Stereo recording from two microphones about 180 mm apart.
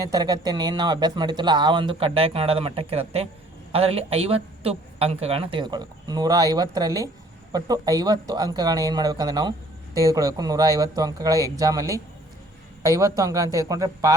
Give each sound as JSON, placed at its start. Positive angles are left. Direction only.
{"t": 0.0, "sound": "speech", "side_deg": -20}